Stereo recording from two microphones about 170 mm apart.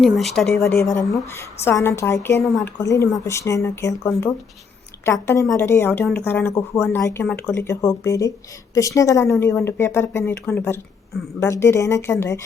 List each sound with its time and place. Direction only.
0.0 s speech: centre (ahead or behind)
0.6 s a woman's voice: 15° left (ahead or behind)